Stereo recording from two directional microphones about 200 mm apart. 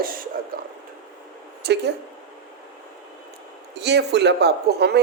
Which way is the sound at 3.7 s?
55° right (ahead or behind).